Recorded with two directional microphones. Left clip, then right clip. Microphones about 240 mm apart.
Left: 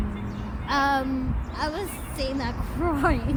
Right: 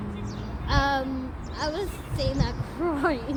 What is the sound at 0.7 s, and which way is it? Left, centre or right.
A woman's voice, centre.